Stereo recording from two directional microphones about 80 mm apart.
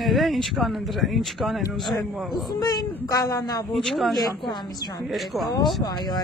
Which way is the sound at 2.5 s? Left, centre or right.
Left.